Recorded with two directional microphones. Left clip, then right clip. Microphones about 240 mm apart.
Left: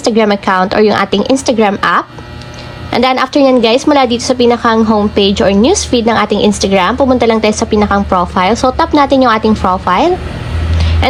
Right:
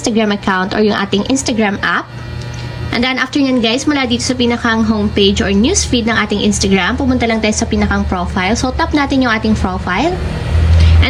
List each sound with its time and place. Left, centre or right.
0.0 s a woman's voice: left
0.4 s a woman's voice: right
0.7 s a woman's voice: left